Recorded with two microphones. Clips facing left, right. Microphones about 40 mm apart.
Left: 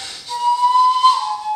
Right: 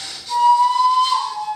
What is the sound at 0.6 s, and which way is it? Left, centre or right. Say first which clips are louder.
Whistle: left 2 dB; left.